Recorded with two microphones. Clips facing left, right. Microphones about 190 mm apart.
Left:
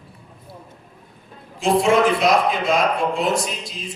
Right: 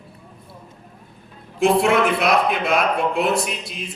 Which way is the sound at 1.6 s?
60° right (ahead or behind).